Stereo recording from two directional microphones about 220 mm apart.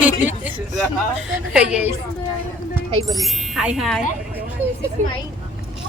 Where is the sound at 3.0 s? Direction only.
Centre (ahead or behind).